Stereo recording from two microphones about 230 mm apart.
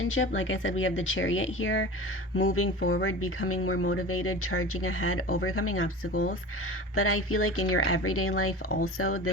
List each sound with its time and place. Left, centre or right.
0.0 s speech: left
6.9 s speech: left